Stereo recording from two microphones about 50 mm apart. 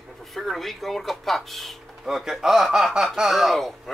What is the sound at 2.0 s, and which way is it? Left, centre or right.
Speech, centre.